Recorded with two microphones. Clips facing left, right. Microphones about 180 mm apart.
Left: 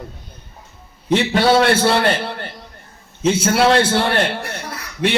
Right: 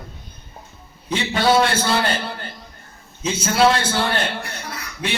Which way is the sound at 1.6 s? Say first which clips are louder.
Left 5 dB; 65° left (ahead or behind).